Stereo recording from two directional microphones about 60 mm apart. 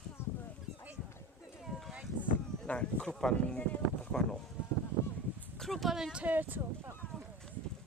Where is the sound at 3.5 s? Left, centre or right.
Left.